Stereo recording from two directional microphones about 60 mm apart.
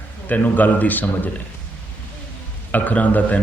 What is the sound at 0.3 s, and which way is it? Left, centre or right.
A man's voice, left.